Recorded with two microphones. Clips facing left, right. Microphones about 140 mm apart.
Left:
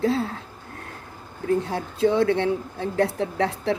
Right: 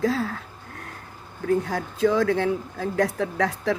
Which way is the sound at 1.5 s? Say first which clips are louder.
Even; 30° left (ahead or behind).